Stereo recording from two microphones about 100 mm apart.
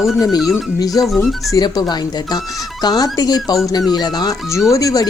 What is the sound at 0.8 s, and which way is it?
Speech, 35° left (ahead or behind).